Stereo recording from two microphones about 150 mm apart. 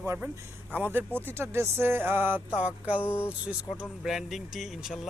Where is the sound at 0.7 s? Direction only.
10° right (ahead or behind).